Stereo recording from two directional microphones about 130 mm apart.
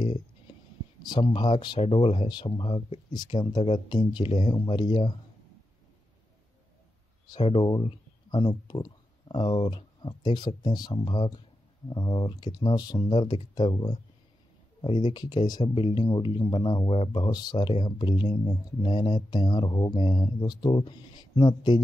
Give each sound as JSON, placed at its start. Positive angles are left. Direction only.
{"t": 1.0, "sound": "speech", "side_deg": 35}
{"t": 1.8, "sound": "speech", "side_deg": 45}
{"t": 7.4, "sound": "speech", "side_deg": 40}
{"t": 17.2, "sound": "speech", "side_deg": 30}